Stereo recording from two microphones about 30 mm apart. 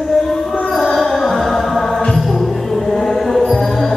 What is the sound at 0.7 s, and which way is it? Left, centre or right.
Music, centre.